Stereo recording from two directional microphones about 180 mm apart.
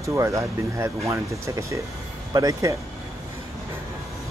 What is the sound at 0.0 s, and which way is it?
Speech, 15° right (ahead or behind).